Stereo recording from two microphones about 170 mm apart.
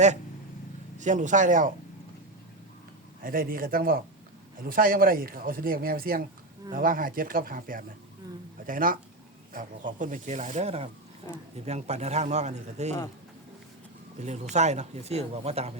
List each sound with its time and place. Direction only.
0.9 s speech: 45° right (ahead or behind)
3.2 s speech: 55° right (ahead or behind); by 12.9 s 40° right (ahead or behind)
14.2 s speech: 45° right (ahead or behind)